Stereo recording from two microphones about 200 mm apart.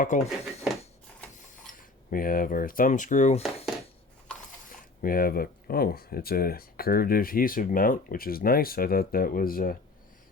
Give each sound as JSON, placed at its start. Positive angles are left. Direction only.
{"t": 0.1, "sound": "speech", "side_deg": 40}
{"t": 2.0, "sound": "speech", "side_deg": 45}
{"t": 4.7, "sound": "speech", "side_deg": 45}